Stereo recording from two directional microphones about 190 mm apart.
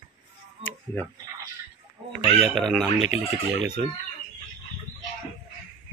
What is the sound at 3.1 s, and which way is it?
Speech, 90° right.